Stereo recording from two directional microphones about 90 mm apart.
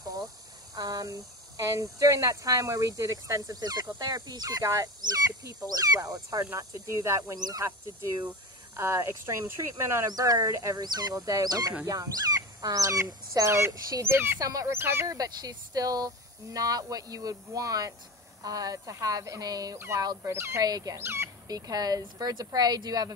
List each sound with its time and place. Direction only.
0.7 s speech: 45° right (ahead or behind)
7.3 s speech: 50° right (ahead or behind)
8.7 s speech: 35° right (ahead or behind)
14.4 s speech: 40° right (ahead or behind)
14.7 s speech: 25° right (ahead or behind)
15.0 s speech: 45° right (ahead or behind)
20.2 s speech: 30° right (ahead or behind)
20.6 s speech: 45° right (ahead or behind)
20.9 s speech: 30° right (ahead or behind)
21.5 s speech: 40° right (ahead or behind)